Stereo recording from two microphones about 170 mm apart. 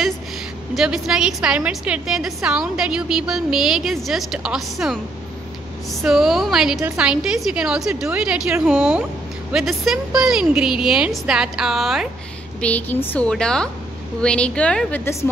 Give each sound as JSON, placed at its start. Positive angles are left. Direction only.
{"t": 0.7, "sound": "a woman's voice", "side_deg": -5}